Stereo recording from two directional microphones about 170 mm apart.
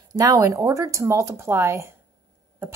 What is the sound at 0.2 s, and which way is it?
A woman's voice, 20° right (ahead or behind).